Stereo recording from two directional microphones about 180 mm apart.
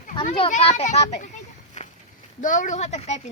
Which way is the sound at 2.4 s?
45° left (ahead or behind).